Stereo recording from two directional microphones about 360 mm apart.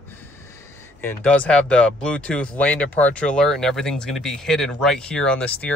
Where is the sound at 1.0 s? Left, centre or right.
Centre.